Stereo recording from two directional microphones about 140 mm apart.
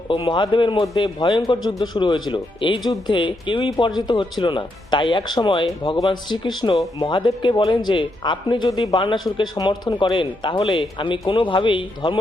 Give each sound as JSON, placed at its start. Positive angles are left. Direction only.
{"t": 0.1, "sound": "speech", "side_deg": 35}